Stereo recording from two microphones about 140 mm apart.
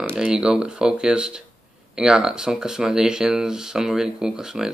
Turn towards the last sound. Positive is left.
turn(degrees=-5)  # may be behind; listen again after turning